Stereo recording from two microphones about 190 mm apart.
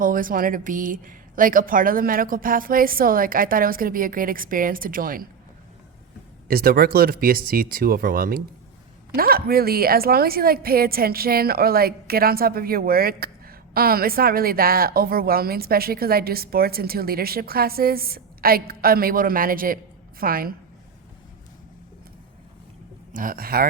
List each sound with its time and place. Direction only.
0.0 s a woman's voice: 45° right (ahead or behind)
6.5 s a woman's voice: 50° right (ahead or behind)
23.1 s a woman's voice: 50° right (ahead or behind)